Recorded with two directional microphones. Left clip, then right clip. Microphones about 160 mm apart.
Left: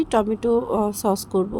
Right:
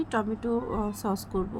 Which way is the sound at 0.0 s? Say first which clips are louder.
Left 9 dB; 45° left (ahead or behind).